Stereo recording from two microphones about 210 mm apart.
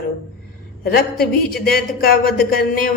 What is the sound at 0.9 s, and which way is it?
Speech, 45° left (ahead or behind).